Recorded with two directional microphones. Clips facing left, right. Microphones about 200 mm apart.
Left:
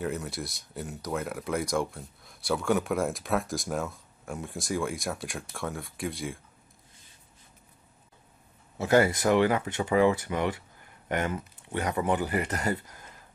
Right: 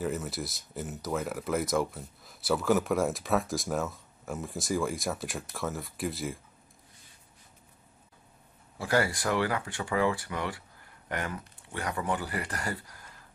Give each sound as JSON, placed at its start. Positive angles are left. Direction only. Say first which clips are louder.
{"t": 0.0, "sound": "speech", "louder": "even", "side_deg": 0}
{"t": 8.7, "sound": "speech", "louder": "left 5 dB", "side_deg": 20}